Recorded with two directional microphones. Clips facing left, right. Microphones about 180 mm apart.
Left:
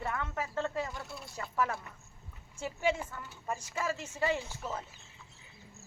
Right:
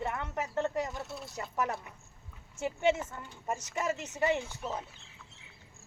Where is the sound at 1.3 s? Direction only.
20° right (ahead or behind).